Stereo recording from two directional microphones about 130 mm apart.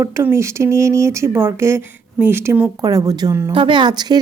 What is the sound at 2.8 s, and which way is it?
Speech, 30° right (ahead or behind).